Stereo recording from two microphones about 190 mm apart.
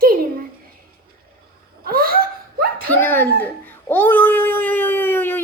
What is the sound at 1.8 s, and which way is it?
Laughter, 50° right (ahead or behind).